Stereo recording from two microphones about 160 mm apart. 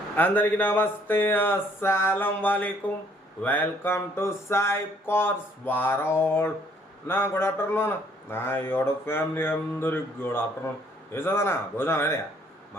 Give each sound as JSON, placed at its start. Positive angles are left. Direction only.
{"t": 0.2, "sound": "speech", "side_deg": 10}